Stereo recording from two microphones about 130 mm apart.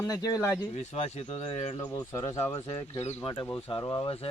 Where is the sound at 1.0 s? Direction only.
50° left (ahead or behind).